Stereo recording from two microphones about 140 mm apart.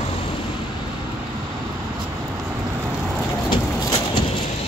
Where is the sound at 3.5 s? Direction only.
30° left (ahead or behind).